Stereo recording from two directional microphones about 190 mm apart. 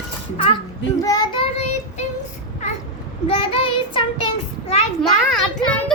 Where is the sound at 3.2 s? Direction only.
30° left (ahead or behind).